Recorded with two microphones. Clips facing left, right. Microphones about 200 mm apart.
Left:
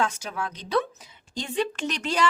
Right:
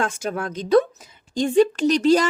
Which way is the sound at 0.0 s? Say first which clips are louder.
Right 4 dB; 50° right (ahead or behind).